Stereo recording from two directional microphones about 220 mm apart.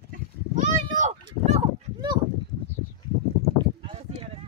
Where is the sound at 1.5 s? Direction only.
25° right (ahead or behind).